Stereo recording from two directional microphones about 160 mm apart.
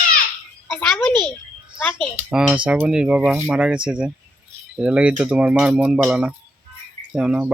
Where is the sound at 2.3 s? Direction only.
5° right (ahead or behind).